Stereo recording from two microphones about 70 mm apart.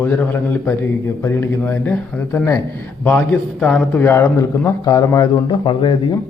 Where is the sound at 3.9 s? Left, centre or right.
Left.